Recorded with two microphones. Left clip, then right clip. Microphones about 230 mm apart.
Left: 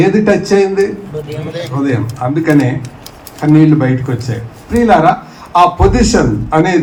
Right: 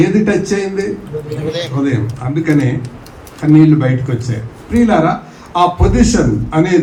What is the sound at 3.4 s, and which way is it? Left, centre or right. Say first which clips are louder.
Speech: even; left.